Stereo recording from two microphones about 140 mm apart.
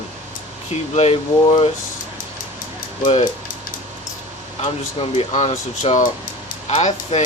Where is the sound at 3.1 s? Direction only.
45° left (ahead or behind).